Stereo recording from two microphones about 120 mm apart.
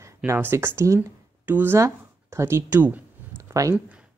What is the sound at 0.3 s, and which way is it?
Speech, 20° right (ahead or behind).